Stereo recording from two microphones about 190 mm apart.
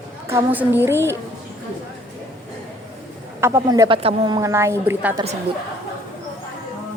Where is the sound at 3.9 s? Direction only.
30° right (ahead or behind); by 5.2 s 10° right (ahead or behind).